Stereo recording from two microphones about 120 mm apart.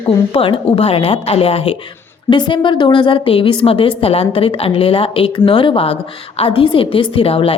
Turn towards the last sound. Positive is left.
turn(degrees=50)  # may be behind; listen again after turning